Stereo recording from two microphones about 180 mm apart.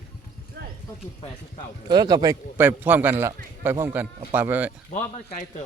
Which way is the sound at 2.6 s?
10° right (ahead or behind).